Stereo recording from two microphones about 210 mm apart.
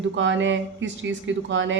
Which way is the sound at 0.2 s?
60° right (ahead or behind).